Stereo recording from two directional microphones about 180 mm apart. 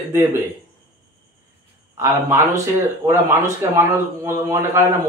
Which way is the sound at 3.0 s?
15° right (ahead or behind).